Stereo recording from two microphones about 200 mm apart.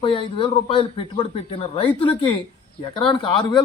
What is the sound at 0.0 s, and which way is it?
Speech, 25° left (ahead or behind).